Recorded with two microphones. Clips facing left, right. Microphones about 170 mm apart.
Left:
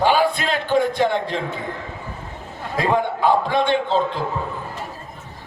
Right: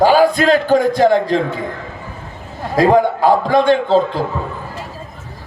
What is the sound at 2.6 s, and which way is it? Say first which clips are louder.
A man's voice: right 8 dB; 40° right (ahead or behind).